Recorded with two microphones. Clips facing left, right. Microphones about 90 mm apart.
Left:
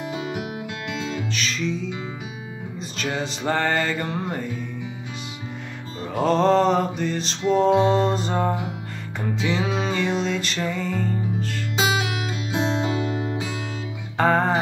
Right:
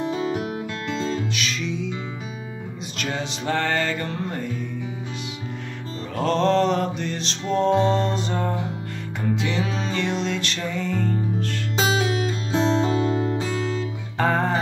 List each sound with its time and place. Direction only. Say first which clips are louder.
0.0 s music: right 4 dB; 35° right (ahead or behind)
1.3 s music: left 1 dB; centre (ahead or behind)
3.0 s music: left 1 dB; 5° left (ahead or behind)
6.1 s music: left 2 dB; 5° left (ahead or behind)
11.7 s music: right 1 dB; 35° right (ahead or behind)
14.1 s music: left 2 dB; centre (ahead or behind)